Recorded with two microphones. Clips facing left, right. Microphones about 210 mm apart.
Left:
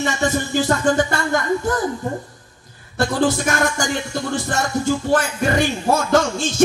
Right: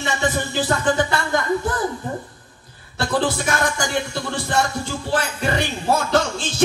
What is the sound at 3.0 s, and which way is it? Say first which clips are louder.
Speech: left 3 dB; 45° left (ahead or behind).